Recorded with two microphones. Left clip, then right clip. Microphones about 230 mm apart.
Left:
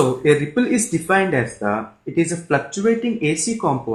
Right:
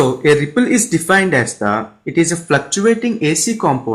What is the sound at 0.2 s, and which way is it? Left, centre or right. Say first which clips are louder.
Speech: right 4 dB; right.